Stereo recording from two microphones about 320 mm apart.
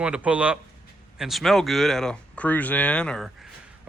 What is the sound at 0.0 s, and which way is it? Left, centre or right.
Speech, centre.